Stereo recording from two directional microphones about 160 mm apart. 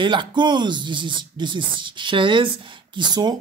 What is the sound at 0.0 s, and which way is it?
Speech, 30° right (ahead or behind).